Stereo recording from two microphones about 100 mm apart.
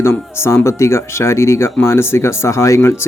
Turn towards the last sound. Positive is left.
turn(degrees=25)  # may be behind; listen again after turning